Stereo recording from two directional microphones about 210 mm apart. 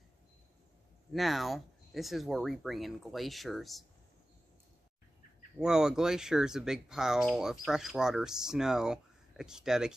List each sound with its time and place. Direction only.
1.1 s speech: centre (ahead or behind)
5.6 s speech: 5° right (ahead or behind)